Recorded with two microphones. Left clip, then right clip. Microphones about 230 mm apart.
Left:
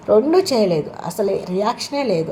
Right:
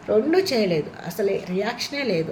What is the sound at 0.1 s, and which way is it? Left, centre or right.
A woman's voice, centre.